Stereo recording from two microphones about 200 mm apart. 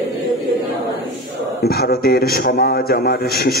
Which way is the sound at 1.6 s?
50° left (ahead or behind).